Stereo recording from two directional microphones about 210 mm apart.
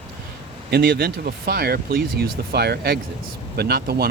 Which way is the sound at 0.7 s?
45° right (ahead or behind).